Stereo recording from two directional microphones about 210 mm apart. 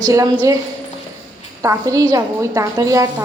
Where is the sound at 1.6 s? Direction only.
15° right (ahead or behind).